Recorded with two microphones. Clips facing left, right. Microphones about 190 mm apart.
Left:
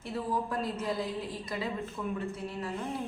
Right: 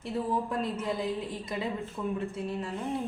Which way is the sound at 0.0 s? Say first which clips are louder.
Right 2 dB; 25° right (ahead or behind).